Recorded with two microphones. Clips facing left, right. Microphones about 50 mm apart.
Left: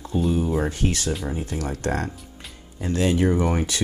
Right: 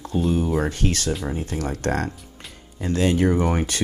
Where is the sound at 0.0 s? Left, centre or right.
Right.